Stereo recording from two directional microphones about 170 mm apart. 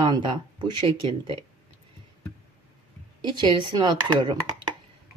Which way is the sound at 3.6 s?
25° right (ahead or behind).